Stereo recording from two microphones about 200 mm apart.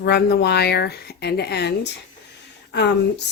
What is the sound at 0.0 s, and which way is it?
A woman's voice, 55° left (ahead or behind).